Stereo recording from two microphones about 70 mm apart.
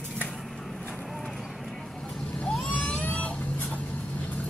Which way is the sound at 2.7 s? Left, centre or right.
Left.